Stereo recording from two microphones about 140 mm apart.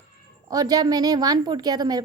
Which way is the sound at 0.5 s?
25° right (ahead or behind).